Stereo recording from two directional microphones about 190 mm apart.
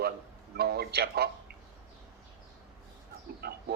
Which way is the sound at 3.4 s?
55° right (ahead or behind).